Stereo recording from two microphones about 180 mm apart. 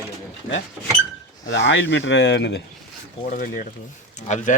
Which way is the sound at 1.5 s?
75° left (ahead or behind).